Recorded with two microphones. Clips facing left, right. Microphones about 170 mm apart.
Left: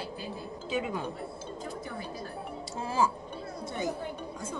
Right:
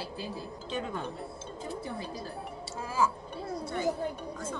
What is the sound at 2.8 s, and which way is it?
Speech, 30° left (ahead or behind).